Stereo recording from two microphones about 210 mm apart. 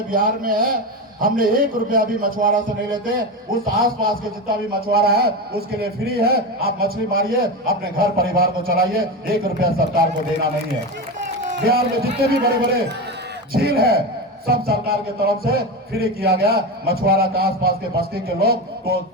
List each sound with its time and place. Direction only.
0.1 s speech: 45° right (ahead or behind)
11.4 s speech: 45° right (ahead or behind)